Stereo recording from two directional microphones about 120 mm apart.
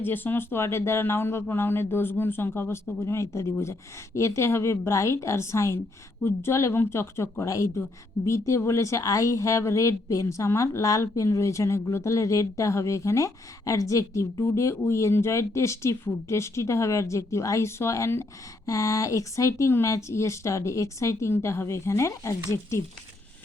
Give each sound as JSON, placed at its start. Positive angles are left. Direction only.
{"t": 0.0, "sound": "speech", "side_deg": 15}